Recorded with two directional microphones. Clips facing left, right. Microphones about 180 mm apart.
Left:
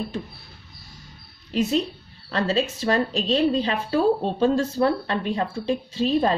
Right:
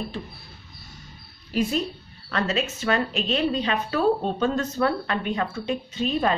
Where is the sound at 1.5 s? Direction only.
25° left (ahead or behind).